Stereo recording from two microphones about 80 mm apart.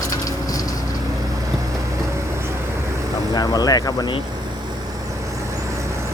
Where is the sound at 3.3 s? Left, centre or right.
Left.